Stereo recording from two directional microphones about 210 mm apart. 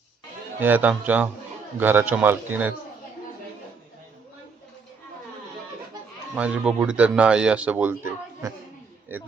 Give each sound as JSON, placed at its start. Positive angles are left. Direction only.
{"t": 0.6, "sound": "a man's voice", "side_deg": -10}
{"t": 6.3, "sound": "a man's voice", "side_deg": -5}